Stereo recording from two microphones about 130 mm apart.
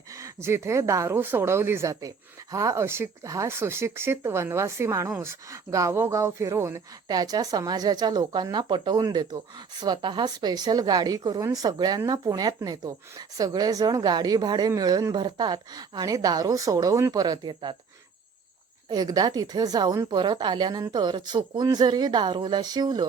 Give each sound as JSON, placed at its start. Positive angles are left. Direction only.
{"t": 0.2, "sound": "a woman's voice", "side_deg": -20}
{"t": 18.9, "sound": "a woman's voice", "side_deg": -30}